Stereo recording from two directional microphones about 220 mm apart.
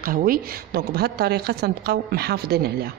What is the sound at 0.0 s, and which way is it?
A woman's voice, 40° right (ahead or behind).